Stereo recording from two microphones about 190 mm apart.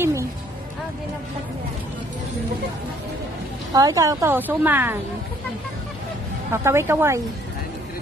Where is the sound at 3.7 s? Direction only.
20° right (ahead or behind).